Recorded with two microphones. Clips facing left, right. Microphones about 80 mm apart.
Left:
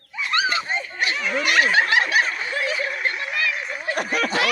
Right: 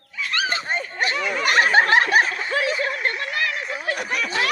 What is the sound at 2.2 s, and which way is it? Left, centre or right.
Speech, right.